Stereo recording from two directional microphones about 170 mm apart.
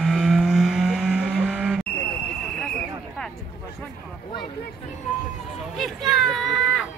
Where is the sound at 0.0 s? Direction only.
5° right (ahead or behind).